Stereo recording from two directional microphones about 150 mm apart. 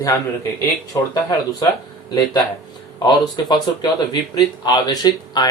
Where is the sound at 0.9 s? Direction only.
25° left (ahead or behind).